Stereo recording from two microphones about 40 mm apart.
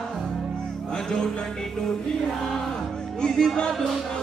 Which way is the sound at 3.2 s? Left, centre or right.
Centre.